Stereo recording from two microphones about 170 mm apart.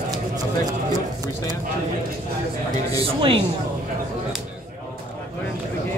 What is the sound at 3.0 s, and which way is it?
Music, 35° right (ahead or behind).